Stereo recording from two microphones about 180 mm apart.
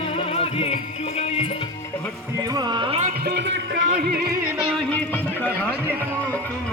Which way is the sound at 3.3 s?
80° right.